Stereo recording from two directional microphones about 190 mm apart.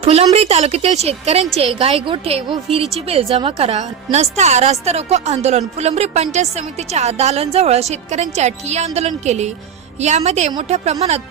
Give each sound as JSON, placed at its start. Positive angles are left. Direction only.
{"t": 0.0, "sound": "a woman's voice", "side_deg": -30}